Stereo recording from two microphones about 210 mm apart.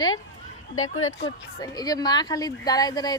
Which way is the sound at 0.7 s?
75° left (ahead or behind).